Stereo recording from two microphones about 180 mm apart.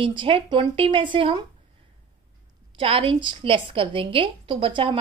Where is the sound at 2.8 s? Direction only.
30° right (ahead or behind).